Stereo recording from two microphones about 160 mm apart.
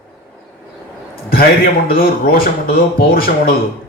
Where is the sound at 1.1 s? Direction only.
70° left (ahead or behind).